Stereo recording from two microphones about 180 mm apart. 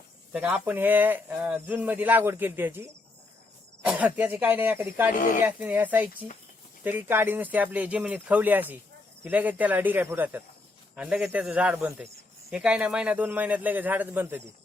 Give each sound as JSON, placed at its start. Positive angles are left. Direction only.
{"t": 0.3, "sound": "speech", "side_deg": -5}
{"t": 5.1, "sound": "speech", "side_deg": 45}
{"t": 5.4, "sound": "speech", "side_deg": -10}